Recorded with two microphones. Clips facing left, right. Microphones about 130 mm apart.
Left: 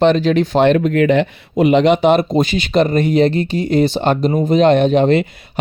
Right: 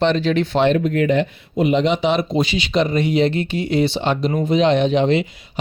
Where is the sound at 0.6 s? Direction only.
75° left (ahead or behind).